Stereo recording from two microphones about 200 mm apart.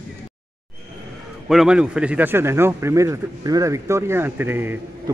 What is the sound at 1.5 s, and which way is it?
Speech, 5° right (ahead or behind).